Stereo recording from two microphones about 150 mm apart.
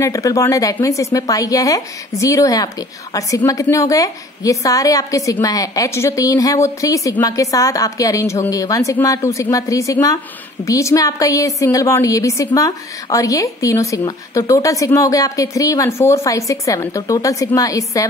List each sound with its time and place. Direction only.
0.0 s a woman's voice: 20° left (ahead or behind)